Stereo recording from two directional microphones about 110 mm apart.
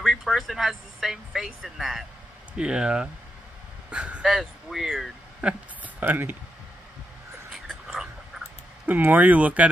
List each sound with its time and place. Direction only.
0.0 s speech: 5° right (ahead or behind)
5.5 s speech: 15° right (ahead or behind)
7.6 s a sound: 5° right (ahead or behind)
8.8 s speech: 15° right (ahead or behind)